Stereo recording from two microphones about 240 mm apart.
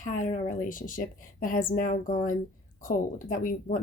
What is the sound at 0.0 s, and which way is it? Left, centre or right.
A woman's voice, left.